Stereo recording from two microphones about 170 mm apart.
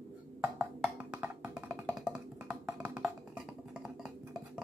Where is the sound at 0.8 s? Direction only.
10° right (ahead or behind).